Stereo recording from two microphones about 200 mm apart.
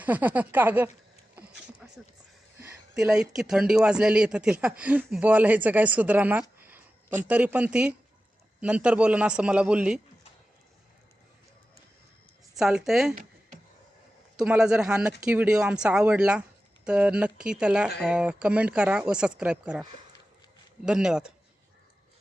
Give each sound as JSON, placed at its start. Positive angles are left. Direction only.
{"t": 0.0, "sound": "speech", "side_deg": -10}
{"t": 1.4, "sound": "a sound", "side_deg": -5}
{"t": 2.6, "sound": "speech", "side_deg": -10}
{"t": 12.5, "sound": "speech", "side_deg": 0}
{"t": 14.3, "sound": "speech", "side_deg": -5}
{"t": 20.8, "sound": "speech", "side_deg": -5}